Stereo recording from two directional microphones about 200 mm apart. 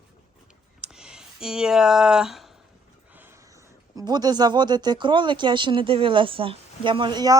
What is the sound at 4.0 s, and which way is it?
Speech, 20° right (ahead or behind).